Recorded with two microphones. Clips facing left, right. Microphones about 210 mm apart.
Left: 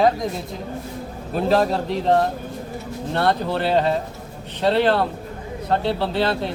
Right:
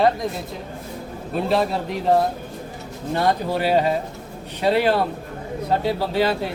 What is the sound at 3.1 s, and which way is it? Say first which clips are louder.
Speech: even; 10° right (ahead or behind).